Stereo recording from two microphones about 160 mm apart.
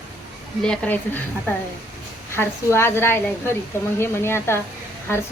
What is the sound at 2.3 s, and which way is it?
Speech, 15° left (ahead or behind).